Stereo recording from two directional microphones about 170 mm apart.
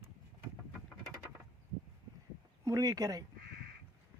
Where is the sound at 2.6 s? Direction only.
20° right (ahead or behind).